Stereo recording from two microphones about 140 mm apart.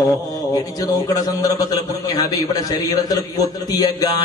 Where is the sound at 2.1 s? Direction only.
25° left (ahead or behind).